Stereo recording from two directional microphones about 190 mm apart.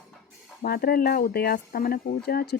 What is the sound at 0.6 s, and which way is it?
Speech, 55° left (ahead or behind).